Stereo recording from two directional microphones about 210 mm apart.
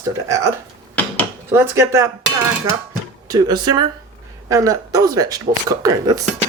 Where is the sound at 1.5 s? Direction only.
15° right (ahead or behind).